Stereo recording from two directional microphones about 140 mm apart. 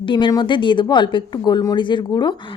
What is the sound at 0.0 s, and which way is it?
A woman's voice, 35° left (ahead or behind).